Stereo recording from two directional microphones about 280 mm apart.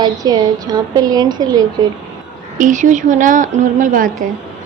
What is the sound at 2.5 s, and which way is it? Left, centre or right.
Speech, right.